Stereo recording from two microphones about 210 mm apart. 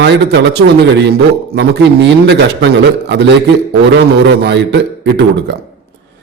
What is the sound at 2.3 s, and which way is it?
Speech, 55° right (ahead or behind).